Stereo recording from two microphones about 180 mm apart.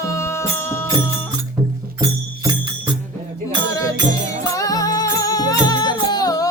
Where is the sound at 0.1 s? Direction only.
15° left (ahead or behind).